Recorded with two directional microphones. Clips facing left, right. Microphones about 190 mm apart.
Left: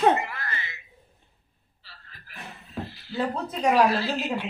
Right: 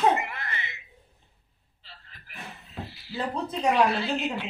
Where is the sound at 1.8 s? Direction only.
20° right (ahead or behind).